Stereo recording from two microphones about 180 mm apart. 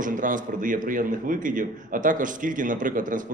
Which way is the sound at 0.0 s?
45° right (ahead or behind).